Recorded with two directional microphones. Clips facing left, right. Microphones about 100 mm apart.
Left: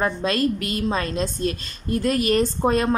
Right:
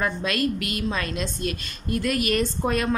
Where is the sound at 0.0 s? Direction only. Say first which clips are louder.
Left 3 dB; 30° left (ahead or behind).